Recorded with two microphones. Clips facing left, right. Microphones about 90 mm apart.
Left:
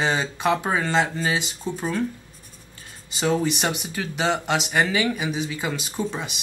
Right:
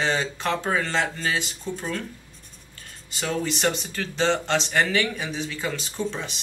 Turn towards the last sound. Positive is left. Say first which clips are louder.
# left 1 dB
turn(degrees=15)  # may be behind; listen again after turning